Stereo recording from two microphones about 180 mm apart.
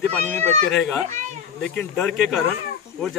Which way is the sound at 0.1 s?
5° left (ahead or behind).